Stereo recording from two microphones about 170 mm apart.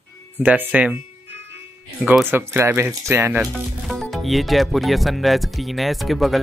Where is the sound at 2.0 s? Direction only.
10° right (ahead or behind).